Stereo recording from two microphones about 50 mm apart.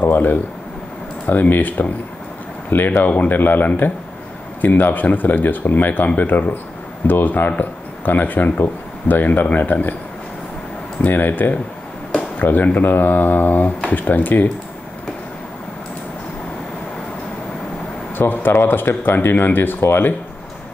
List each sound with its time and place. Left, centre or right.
0.0 s speech: left
11.1 s speech: left
18.1 s speech: left